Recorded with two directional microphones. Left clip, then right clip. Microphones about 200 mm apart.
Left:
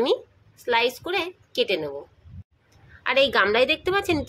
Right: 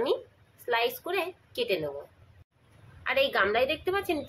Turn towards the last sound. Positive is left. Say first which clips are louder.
# left 6 dB
turn(degrees=60)  # may be behind; listen again after turning